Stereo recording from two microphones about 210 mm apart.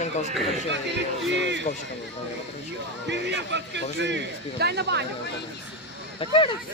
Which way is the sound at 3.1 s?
55° right (ahead or behind).